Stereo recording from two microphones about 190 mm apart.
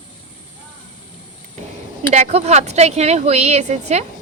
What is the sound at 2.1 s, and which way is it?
Speech, 35° right (ahead or behind).